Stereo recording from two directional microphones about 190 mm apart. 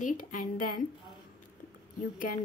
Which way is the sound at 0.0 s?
45° left (ahead or behind).